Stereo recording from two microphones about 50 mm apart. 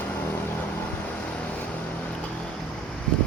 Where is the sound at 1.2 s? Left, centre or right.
Centre.